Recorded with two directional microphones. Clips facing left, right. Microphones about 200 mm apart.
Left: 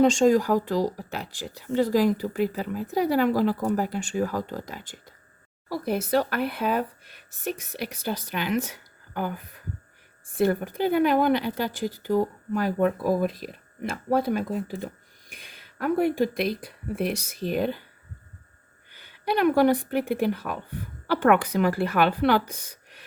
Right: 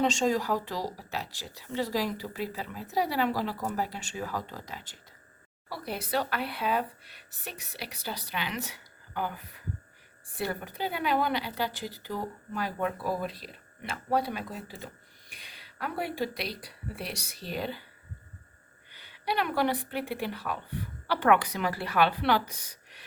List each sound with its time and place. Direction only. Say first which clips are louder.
0.0 s speech: left 8 dB; 50° left (ahead or behind)
18.9 s speech: left 5 dB; 50° left (ahead or behind)